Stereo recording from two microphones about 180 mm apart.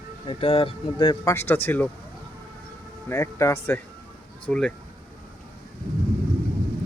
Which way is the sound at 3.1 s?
15° left (ahead or behind).